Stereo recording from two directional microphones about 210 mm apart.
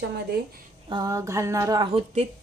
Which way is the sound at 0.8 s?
20° right (ahead or behind).